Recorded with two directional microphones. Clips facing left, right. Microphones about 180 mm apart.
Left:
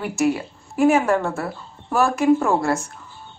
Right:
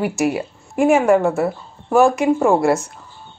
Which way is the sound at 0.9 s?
15° right (ahead or behind).